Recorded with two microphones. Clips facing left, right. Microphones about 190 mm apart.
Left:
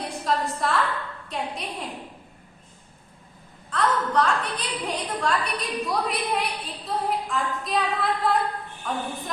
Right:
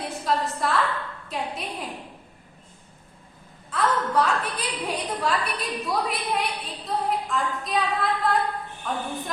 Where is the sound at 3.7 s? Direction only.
5° right (ahead or behind).